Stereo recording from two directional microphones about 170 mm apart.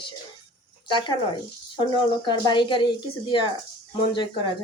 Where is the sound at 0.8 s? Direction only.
25° left (ahead or behind).